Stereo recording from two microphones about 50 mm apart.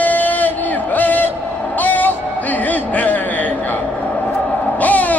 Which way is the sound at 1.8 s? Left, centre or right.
Left.